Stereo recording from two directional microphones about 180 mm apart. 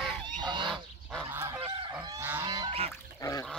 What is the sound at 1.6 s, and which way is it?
Fowl, 30° right (ahead or behind).